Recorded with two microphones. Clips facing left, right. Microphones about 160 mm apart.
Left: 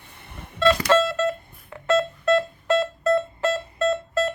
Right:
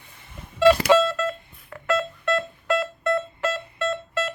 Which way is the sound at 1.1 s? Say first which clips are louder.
Left 3 dB; 25° left (ahead or behind).